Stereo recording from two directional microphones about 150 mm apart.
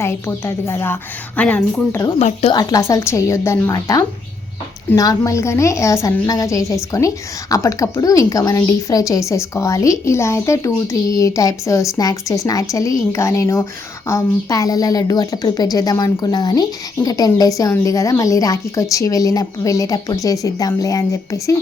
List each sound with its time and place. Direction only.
0.0 s a woman's voice: 15° left (ahead or behind)
2.1 s speech: 45° left (ahead or behind)
2.5 s a woman's voice: 25° left (ahead or behind)